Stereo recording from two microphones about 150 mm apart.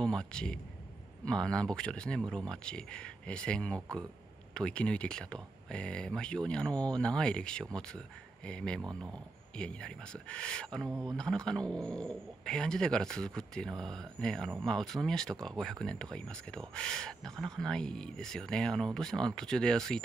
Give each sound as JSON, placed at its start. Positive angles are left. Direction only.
{"t": 0.0, "sound": "a man's voice", "side_deg": 5}
{"t": 10.9, "sound": "speech", "side_deg": -20}
{"t": 11.1, "sound": "speech", "side_deg": 5}